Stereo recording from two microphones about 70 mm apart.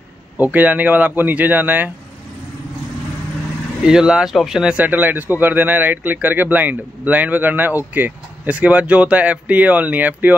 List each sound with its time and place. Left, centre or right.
0.4 s speech: right
3.8 s speech: centre
4.8 s speech: right